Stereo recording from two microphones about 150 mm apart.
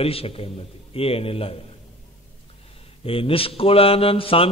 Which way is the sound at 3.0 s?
40° left (ahead or behind).